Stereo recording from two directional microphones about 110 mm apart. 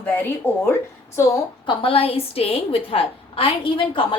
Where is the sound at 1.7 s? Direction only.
55° left (ahead or behind).